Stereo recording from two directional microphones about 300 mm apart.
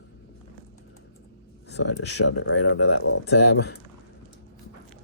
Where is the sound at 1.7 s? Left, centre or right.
Left.